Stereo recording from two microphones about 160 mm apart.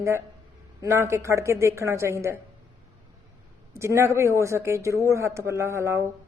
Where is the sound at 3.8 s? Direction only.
15° right (ahead or behind).